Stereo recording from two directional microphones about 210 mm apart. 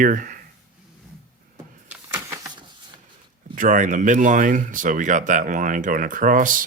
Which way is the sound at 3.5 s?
40° right (ahead or behind).